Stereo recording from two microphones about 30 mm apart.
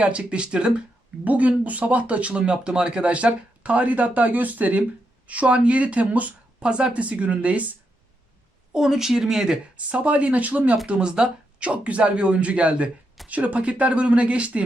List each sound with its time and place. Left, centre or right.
0.0 s speech: right
0.4 s speech: right
1.2 s speech: right
2.4 s speech: right
3.0 s speech: right
3.8 s speech: right
5.2 s speech: right
6.6 s speech: right
6.9 s speech: right
8.7 s speech: centre
9.7 s speech: right
11.0 s speech: right
11.6 s speech: right